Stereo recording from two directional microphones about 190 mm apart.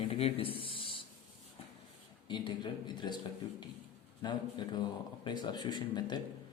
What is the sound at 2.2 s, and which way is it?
Speech, 25° left (ahead or behind).